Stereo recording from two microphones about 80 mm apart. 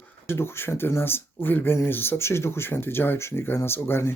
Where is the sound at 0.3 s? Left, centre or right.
Left.